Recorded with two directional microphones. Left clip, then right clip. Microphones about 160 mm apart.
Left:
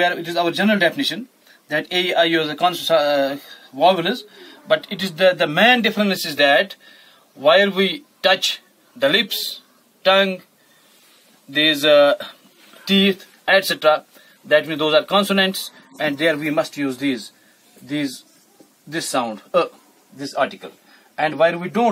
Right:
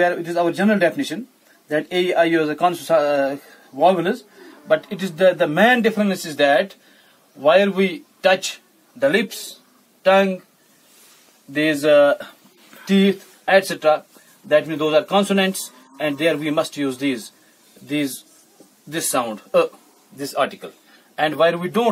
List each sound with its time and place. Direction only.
0.0 s a man's voice: 20° right (ahead or behind)
11.5 s a man's voice: 10° right (ahead or behind)